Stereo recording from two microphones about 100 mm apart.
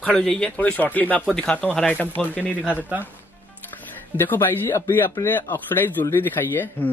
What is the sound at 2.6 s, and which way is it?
Speech, 15° right (ahead or behind).